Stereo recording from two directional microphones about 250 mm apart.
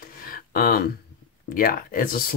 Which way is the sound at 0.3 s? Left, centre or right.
Left.